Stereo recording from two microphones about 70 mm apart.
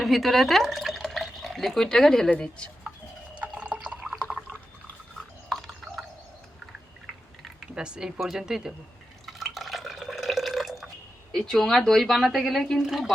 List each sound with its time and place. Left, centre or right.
0.0 s speech: centre
3.3 s liquid: centre
5.5 s horse: centre
7.6 s speech: centre
9.2 s drip: centre
11.3 s speech: centre